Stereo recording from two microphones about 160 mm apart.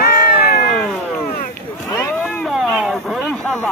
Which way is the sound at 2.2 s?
Centre (ahead or behind).